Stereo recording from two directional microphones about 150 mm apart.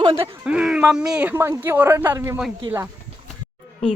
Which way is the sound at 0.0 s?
30° right (ahead or behind).